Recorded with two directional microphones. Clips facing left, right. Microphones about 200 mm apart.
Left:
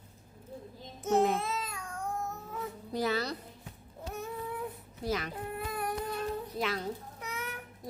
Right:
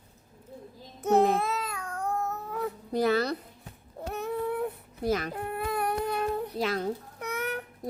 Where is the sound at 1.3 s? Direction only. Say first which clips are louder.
Right 5 dB; 60° right (ahead or behind).